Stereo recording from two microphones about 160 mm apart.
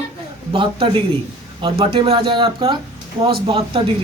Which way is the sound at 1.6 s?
30° right (ahead or behind).